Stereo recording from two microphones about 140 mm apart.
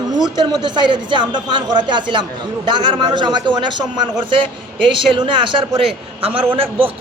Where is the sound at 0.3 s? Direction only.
30° right (ahead or behind).